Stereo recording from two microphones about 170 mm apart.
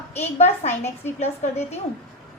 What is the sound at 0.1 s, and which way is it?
A woman's voice, 40° left (ahead or behind).